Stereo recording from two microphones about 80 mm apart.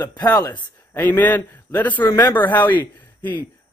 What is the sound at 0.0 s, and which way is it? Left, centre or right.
Speech, left.